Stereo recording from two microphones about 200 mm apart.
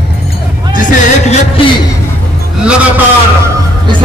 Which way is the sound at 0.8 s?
40° left (ahead or behind).